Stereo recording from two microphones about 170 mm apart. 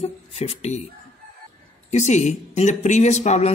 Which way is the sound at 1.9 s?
40° left (ahead or behind).